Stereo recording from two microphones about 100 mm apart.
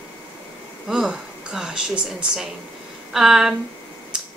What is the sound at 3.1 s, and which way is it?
Speech, 5° right (ahead or behind).